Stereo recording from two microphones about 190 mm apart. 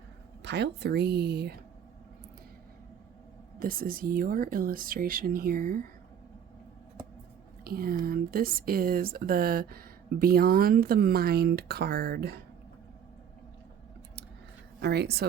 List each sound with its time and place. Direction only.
0.4 s speech: 60° right (ahead or behind)
3.6 s speech: 50° right (ahead or behind)
7.6 s speech: 50° right (ahead or behind)
14.8 s speech: 60° right (ahead or behind)